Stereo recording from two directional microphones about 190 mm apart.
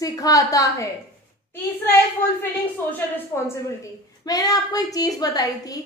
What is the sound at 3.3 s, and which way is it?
A woman's voice, 10° left (ahead or behind).